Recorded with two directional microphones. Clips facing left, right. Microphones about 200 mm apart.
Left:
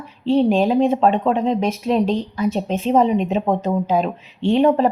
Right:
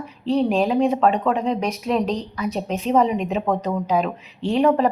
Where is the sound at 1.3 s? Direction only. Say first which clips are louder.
Left 3 dB; centre (ahead or behind).